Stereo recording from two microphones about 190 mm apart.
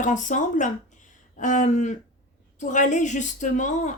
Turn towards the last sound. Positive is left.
turn(degrees=40)  # may be behind; listen again after turning